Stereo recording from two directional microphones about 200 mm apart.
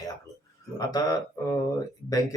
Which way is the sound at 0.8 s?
20° left (ahead or behind).